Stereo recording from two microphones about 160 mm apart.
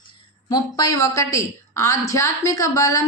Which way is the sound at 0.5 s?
25° left (ahead or behind).